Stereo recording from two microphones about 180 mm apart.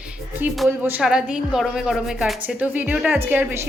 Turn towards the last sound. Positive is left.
turn(degrees=-10)  # may be behind; listen again after turning